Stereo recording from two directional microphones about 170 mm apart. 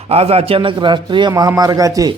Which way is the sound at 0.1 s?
35° right (ahead or behind).